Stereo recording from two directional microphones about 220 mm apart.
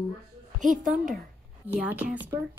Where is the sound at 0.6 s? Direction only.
35° right (ahead or behind).